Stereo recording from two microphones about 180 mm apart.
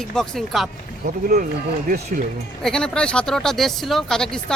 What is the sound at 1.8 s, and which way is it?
Speech, 50° right (ahead or behind).